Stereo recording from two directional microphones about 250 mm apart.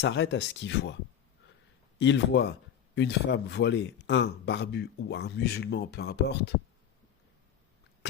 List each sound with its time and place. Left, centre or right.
0.0 s a man's voice: left
2.0 s a man's voice: left